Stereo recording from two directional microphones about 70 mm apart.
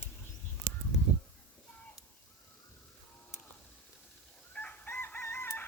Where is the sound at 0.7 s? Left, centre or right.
Centre.